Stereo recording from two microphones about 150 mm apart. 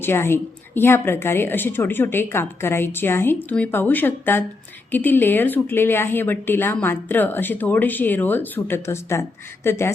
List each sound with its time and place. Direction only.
0.0 s a woman's voice: 15° left (ahead or behind)